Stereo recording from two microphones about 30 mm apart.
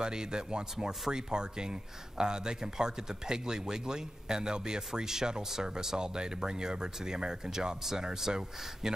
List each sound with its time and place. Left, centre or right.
0.0 s speech: right